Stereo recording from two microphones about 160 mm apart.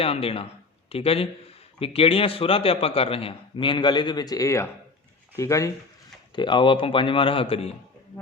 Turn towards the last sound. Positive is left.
turn(degrees=35)  # may be behind; listen again after turning